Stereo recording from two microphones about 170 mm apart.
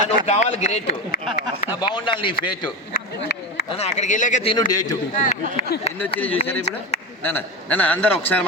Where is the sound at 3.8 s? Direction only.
45° left (ahead or behind).